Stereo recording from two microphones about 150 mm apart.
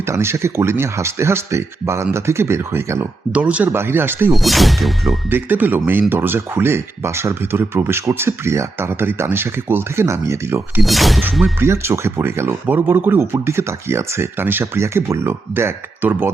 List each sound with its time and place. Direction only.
0.0 s speech: 15° right (ahead or behind)
4.3 s speech: centre (ahead or behind)
5.3 s speech: 10° right (ahead or behind)
10.8 s speech: centre (ahead or behind)
11.6 s speech: 15° right (ahead or behind)